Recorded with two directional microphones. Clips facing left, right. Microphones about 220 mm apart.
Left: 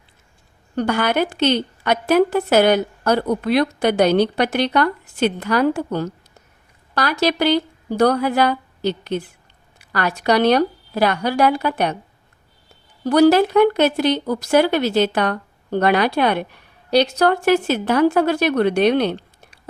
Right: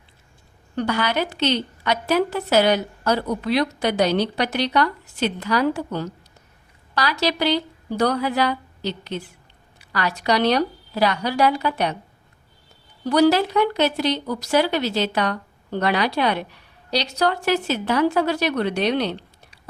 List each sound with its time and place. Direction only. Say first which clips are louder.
0.8 s speech: left 4 dB; 50° left (ahead or behind)
13.1 s speech: left 4 dB; 50° left (ahead or behind)